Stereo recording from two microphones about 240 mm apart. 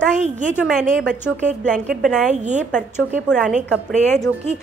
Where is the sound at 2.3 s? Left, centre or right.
Right.